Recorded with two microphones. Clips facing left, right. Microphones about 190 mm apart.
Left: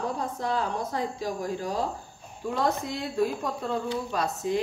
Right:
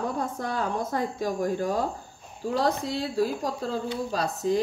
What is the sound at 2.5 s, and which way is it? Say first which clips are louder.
A woman's voice: right 2 dB; 35° right (ahead or behind).